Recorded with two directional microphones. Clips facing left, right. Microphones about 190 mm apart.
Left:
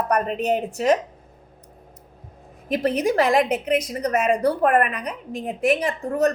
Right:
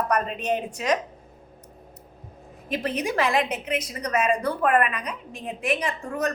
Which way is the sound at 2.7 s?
40° left (ahead or behind).